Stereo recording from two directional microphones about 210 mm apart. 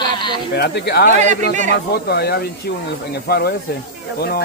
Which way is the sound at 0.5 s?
50° left (ahead or behind).